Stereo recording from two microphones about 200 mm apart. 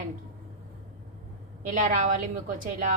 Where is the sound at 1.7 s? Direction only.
40° right (ahead or behind).